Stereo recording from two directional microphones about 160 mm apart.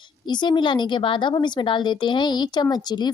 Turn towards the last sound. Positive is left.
turn(degrees=25)  # may be behind; listen again after turning